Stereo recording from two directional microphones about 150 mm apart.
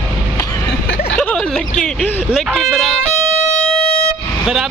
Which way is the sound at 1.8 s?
Centre (ahead or behind).